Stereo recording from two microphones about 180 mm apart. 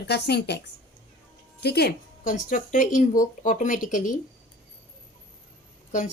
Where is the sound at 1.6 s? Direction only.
60° left (ahead or behind).